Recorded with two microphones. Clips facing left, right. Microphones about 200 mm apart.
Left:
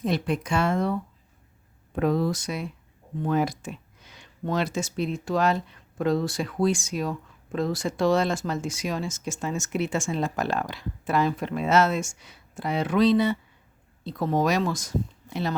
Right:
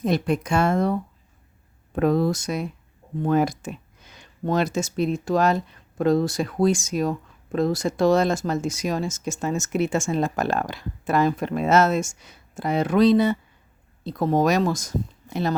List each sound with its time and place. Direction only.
0.0 s speech: 45° right (ahead or behind)
2.0 s speech: 50° right (ahead or behind)